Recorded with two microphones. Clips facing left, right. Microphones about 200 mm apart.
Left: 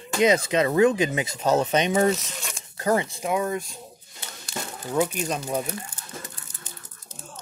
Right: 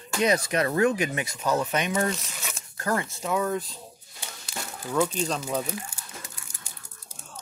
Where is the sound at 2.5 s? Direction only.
20° left (ahead or behind).